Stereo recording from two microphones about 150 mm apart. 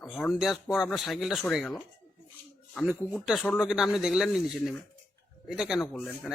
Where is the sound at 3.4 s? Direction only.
10° left (ahead or behind).